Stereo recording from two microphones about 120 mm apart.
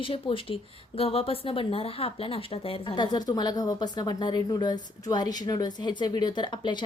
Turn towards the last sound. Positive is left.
turn(degrees=40)  # may be behind; listen again after turning